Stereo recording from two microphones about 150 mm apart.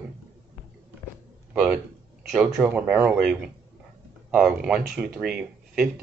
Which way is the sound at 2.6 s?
10° right (ahead or behind).